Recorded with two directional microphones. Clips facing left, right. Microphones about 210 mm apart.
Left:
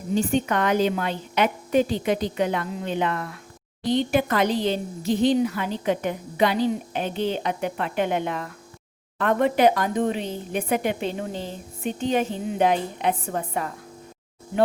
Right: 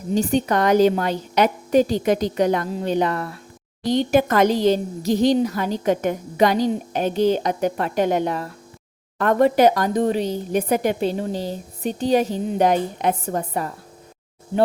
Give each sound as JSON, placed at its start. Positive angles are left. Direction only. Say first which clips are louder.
{"t": 0.1, "sound": "a woman's voice", "louder": "right 3 dB", "side_deg": -40}